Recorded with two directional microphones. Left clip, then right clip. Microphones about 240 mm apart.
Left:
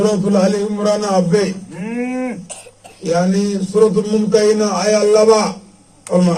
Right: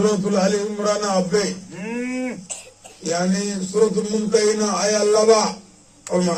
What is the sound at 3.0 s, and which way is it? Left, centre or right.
A man's voice, left.